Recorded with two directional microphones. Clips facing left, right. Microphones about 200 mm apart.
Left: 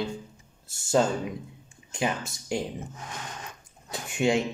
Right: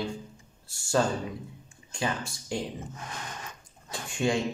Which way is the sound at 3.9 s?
20° left (ahead or behind).